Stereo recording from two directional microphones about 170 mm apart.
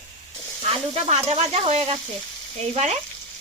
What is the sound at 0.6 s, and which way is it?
Speech, 35° right (ahead or behind).